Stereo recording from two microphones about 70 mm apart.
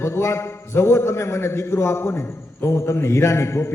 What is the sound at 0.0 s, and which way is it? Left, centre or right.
A man's voice, left.